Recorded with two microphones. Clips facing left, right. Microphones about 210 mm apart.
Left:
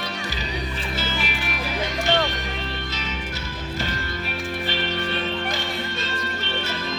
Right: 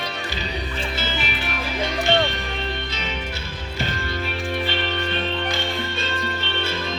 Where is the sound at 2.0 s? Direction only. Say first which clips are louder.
Right 2 dB; 25° right (ahead or behind).